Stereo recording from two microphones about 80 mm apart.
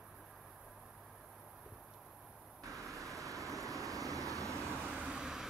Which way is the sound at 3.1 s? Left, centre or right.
Right.